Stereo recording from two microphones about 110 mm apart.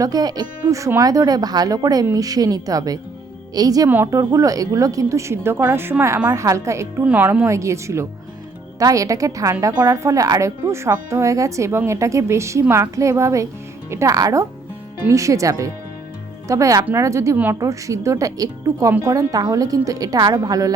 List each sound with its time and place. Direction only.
0.0 s a woman's voice: 35° right (ahead or behind)
3.8 s speech: 15° right (ahead or behind)
4.1 s speech: 35° right (ahead or behind)
7.0 s a woman's voice: 15° right (ahead or behind)
17.3 s speech: 15° right (ahead or behind)
17.6 s a woman's voice: 30° right (ahead or behind)